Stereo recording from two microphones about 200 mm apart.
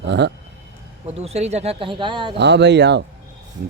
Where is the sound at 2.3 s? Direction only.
60° right (ahead or behind).